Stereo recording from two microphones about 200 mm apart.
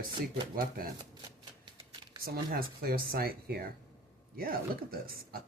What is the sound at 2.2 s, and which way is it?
Speech, 50° right (ahead or behind).